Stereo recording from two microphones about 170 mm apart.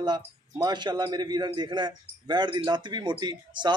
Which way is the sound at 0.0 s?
25° right (ahead or behind).